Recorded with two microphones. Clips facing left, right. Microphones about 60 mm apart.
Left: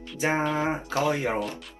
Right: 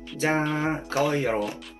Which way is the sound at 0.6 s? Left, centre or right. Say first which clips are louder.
Right 1 dB; centre.